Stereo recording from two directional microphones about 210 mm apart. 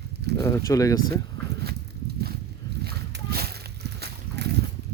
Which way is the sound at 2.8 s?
50° right (ahead or behind).